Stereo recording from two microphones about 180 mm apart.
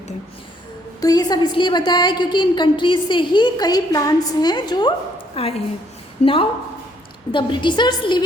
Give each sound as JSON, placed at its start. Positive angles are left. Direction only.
{"t": 1.0, "sound": "a woman's voice", "side_deg": 20}